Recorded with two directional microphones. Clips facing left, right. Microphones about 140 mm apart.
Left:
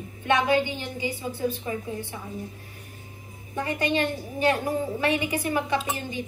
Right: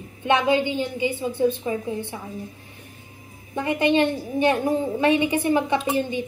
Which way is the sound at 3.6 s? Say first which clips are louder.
Right 6 dB; 20° right (ahead or behind).